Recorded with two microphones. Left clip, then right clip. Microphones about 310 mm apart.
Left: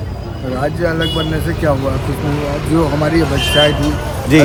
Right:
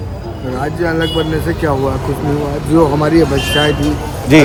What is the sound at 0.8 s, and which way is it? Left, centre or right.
Speech, centre.